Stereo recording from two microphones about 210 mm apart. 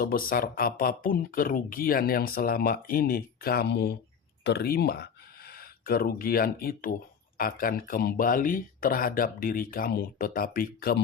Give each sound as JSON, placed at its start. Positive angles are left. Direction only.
{"t": 0.0, "sound": "speech", "side_deg": 45}